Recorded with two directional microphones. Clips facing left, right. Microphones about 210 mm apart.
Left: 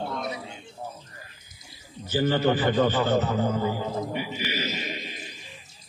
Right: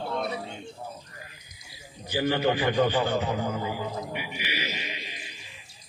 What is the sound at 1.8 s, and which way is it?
A man's voice, 15° right (ahead or behind).